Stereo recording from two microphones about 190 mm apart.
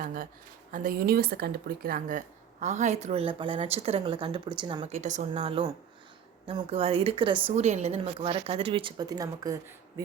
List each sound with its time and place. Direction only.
0.0 s speech: 45° right (ahead or behind); by 4.9 s 25° right (ahead or behind)
4.9 s a woman's voice: 40° right (ahead or behind); by 9.6 s 20° right (ahead or behind)